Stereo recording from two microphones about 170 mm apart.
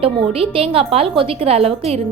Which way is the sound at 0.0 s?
35° right (ahead or behind).